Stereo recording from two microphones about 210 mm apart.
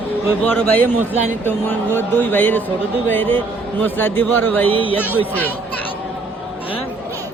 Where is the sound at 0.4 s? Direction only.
5° left (ahead or behind).